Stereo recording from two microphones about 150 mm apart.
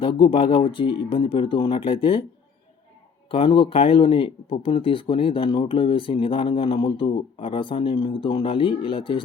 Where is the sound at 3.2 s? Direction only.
35° left (ahead or behind).